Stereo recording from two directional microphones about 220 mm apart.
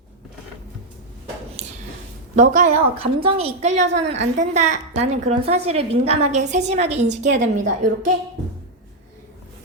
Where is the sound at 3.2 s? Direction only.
25° right (ahead or behind).